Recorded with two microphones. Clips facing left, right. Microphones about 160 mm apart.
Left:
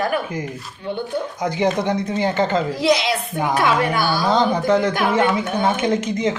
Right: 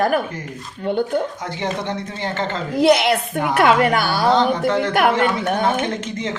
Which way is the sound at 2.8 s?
55° right (ahead or behind).